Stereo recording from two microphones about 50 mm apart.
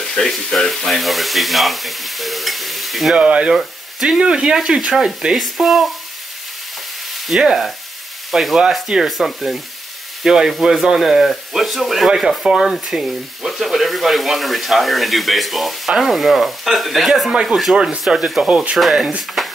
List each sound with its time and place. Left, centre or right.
0.1 s speech: centre
3.2 s speech: centre
3.5 s speech: centre
4.2 s speech: centre
4.6 s speech: centre
7.3 s speech: centre
8.3 s frying: centre
9.0 s speech: centre
17.3 s speech: centre
18.5 s speech: right
18.8 s speech: centre
19.4 s a sound: centre